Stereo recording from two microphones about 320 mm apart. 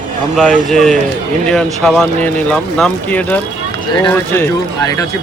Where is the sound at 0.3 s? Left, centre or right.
Centre.